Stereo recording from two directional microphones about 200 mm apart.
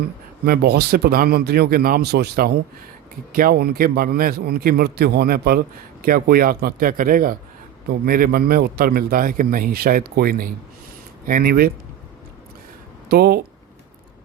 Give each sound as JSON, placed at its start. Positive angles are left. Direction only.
{"t": 0.4, "sound": "a man's voice", "side_deg": -50}
{"t": 13.1, "sound": "speech", "side_deg": -50}